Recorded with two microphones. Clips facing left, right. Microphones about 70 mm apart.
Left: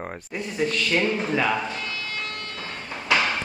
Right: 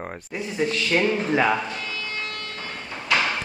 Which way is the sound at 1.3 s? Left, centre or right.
Centre.